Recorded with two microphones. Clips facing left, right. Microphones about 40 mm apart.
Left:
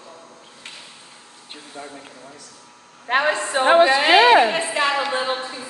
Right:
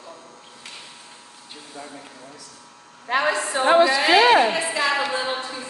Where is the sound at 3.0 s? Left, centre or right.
Left.